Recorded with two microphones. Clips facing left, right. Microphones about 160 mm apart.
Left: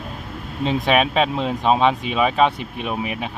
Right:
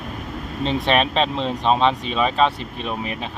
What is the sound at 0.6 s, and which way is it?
Speech, 10° left (ahead or behind).